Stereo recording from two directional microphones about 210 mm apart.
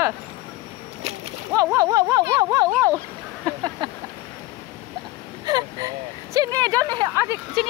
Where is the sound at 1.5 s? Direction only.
15° right (ahead or behind).